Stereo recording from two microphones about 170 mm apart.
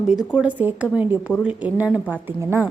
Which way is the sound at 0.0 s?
5° right (ahead or behind).